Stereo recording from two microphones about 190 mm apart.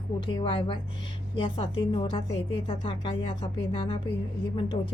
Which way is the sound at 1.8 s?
25° left (ahead or behind).